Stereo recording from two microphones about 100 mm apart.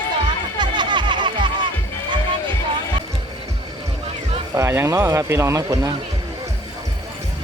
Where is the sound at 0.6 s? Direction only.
50° right (ahead or behind).